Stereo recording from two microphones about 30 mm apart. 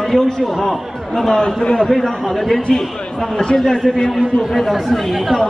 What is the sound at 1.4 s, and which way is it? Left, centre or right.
Speech, left.